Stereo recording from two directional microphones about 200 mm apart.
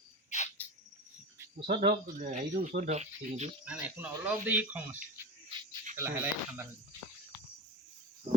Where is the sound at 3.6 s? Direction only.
5° right (ahead or behind).